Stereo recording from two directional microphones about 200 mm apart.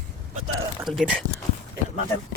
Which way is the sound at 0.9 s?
5° right (ahead or behind).